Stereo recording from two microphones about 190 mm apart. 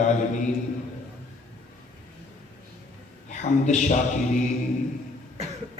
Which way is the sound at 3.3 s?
40° left (ahead or behind).